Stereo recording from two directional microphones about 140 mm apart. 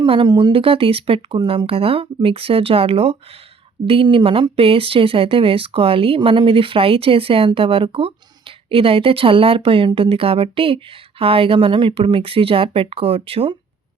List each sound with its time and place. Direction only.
0.0 s speech: 35° right (ahead or behind)